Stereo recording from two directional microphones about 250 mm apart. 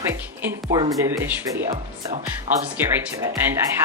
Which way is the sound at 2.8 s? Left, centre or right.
Centre.